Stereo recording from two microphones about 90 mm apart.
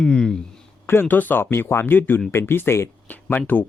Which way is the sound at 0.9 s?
20° left (ahead or behind).